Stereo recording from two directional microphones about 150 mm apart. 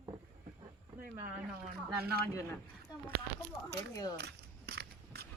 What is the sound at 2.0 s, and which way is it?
Speech, 90° right.